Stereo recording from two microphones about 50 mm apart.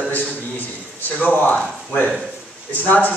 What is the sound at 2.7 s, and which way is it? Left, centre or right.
Speech, left.